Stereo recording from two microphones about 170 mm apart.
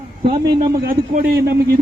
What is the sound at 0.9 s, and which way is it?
Speech, 60° right (ahead or behind).